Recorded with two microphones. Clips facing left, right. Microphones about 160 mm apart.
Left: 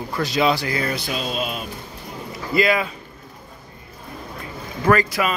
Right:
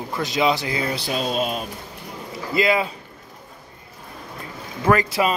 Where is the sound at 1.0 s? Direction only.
40° right (ahead or behind).